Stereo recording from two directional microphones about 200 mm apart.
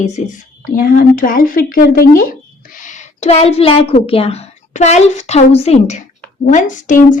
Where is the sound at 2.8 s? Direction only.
30° left (ahead or behind).